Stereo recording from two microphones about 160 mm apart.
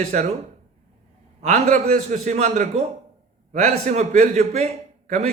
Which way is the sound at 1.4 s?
45° right (ahead or behind).